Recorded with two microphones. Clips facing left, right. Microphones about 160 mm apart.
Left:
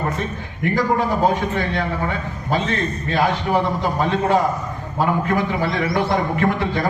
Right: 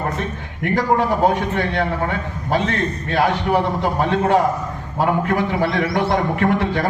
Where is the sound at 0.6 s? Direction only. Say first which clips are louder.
Right 1 dB; 65° right (ahead or behind).